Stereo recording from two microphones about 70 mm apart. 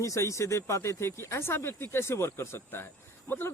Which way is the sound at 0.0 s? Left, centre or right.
Left.